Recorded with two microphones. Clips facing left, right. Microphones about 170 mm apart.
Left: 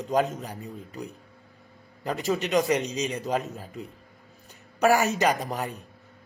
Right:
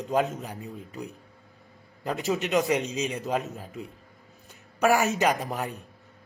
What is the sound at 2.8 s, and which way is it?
Speech, 35° left (ahead or behind).